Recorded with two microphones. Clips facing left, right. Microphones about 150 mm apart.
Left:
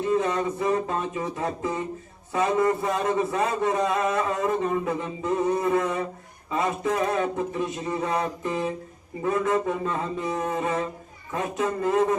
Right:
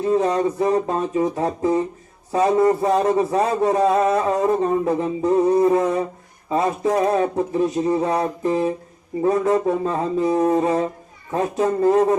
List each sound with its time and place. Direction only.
0.0 s a man's voice: 35° right (ahead or behind)